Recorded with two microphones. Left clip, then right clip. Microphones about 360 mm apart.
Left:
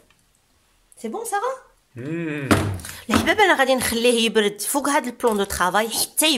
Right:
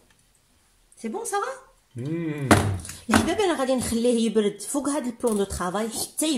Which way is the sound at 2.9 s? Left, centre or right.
Left.